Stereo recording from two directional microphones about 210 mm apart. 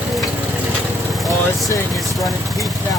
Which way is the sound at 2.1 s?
Centre (ahead or behind).